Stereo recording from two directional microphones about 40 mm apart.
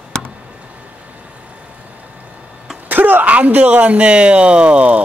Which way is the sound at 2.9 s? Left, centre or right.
Right.